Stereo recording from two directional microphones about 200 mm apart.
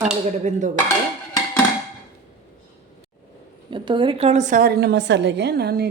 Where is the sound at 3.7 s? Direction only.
25° right (ahead or behind).